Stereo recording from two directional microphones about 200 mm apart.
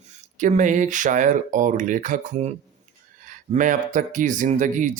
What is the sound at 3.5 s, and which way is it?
Speech, 40° right (ahead or behind).